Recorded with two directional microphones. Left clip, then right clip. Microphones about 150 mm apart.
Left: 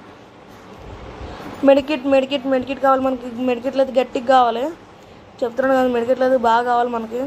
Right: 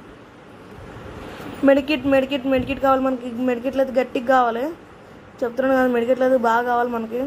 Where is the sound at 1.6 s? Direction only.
10° right (ahead or behind).